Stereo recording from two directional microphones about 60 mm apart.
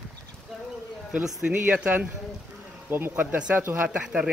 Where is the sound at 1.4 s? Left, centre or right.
Right.